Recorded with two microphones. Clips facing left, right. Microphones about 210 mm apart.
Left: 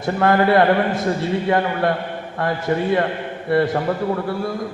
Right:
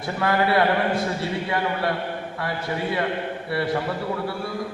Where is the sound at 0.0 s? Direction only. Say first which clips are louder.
Left 6 dB; 50° left (ahead or behind).